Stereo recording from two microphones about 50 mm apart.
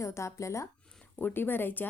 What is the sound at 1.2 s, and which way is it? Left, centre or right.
Speech, left.